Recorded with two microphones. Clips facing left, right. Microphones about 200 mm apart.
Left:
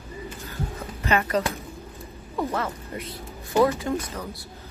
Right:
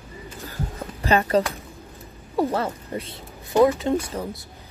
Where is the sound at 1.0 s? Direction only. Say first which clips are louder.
Right 4 dB; 30° right (ahead or behind).